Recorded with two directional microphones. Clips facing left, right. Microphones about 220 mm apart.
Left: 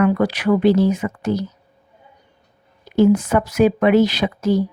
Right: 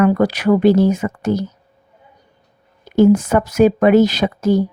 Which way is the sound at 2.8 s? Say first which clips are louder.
Right 3 dB; 45° right (ahead or behind).